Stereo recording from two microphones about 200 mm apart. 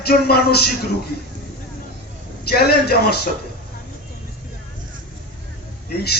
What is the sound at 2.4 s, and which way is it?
Speech, 50° left (ahead or behind).